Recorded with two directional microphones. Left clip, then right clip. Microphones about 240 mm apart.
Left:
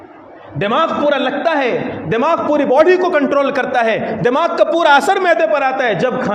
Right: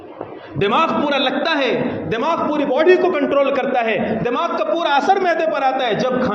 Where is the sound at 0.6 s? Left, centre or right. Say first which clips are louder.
Left 2 dB; left.